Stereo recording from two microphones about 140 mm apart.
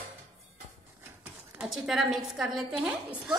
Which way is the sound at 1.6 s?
Centre (ahead or behind).